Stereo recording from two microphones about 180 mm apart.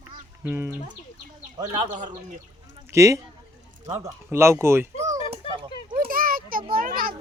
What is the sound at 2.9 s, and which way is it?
Speech, 15° right (ahead or behind).